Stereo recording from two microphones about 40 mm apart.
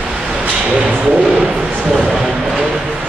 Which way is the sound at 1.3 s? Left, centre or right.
Centre.